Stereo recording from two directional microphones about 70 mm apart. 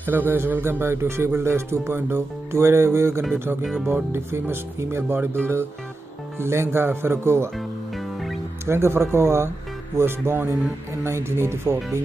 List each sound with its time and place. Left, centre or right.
0.0 s speech: right
7.5 s music: centre
8.6 s speech: right